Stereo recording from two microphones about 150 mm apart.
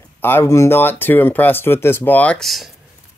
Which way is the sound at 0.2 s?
15° left (ahead or behind).